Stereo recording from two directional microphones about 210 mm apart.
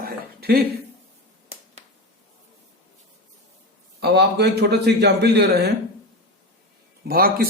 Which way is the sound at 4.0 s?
50° right (ahead or behind).